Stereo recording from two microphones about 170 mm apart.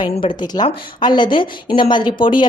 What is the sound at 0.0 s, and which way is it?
A man's voice, 30° left (ahead or behind).